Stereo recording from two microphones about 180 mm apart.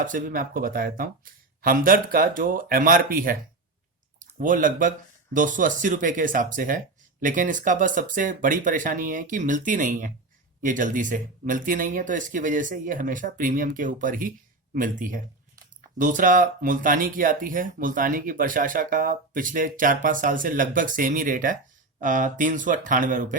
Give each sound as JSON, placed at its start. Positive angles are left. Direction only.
{"t": 0.0, "sound": "speech", "side_deg": -45}